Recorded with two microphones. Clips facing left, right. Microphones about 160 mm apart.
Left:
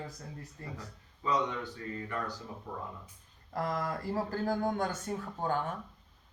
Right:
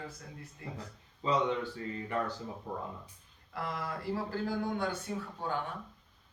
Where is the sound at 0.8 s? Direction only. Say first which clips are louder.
Right 2 dB; 25° right (ahead or behind).